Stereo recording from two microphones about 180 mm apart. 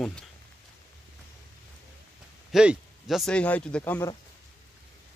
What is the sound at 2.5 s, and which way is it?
Speech, 5° right (ahead or behind).